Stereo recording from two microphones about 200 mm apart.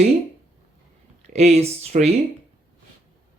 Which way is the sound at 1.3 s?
35° right (ahead or behind).